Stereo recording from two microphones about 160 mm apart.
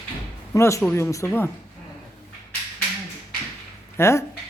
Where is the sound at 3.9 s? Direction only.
15° left (ahead or behind).